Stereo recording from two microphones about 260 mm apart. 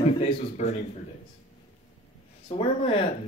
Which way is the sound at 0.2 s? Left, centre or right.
Left.